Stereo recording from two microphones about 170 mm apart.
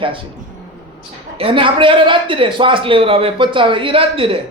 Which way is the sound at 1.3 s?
30° right (ahead or behind).